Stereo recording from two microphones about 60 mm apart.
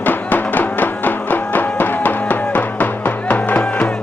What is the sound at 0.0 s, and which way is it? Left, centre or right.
Music, left.